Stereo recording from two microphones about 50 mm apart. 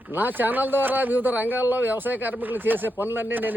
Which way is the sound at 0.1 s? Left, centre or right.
Right.